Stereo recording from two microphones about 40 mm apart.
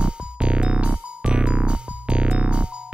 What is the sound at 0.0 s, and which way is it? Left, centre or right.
Music, right.